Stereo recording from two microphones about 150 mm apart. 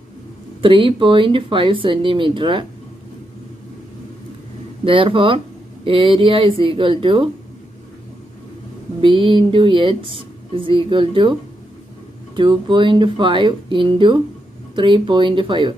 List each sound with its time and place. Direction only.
0.6 s a woman's voice: 35° right (ahead or behind)
4.8 s a woman's voice: 35° right (ahead or behind)
9.0 s a woman's voice: 35° right (ahead or behind)
12.4 s a woman's voice: 30° right (ahead or behind)